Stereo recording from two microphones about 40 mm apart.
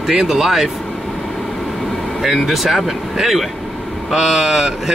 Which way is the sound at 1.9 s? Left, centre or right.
Centre.